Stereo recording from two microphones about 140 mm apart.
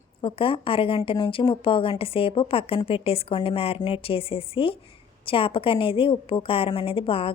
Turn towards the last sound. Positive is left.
turn(degrees=40)  # may be behind; listen again after turning